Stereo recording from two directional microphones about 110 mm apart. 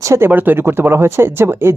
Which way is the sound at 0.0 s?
25° right (ahead or behind).